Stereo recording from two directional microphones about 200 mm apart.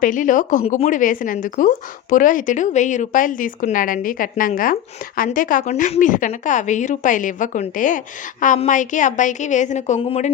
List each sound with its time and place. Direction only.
0.0 s a woman's voice: 40° left (ahead or behind)